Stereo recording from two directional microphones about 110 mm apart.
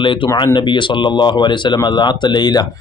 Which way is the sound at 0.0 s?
50° left (ahead or behind).